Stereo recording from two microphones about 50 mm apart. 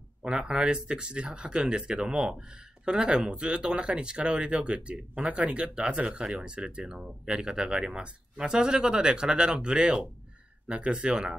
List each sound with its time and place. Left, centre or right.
0.2 s speech: centre